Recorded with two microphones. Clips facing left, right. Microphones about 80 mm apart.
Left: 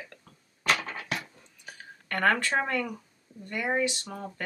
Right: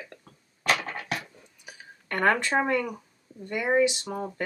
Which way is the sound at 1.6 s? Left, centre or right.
Centre.